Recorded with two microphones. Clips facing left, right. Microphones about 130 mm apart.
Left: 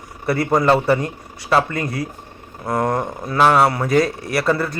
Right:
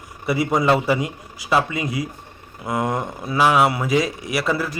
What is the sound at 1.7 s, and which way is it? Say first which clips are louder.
Speech: left 1 dB; 55° left (ahead or behind).